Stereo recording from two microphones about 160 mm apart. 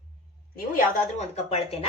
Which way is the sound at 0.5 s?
60° left (ahead or behind).